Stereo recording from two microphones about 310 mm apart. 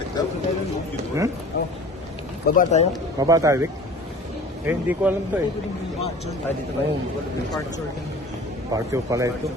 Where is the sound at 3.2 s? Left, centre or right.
Centre.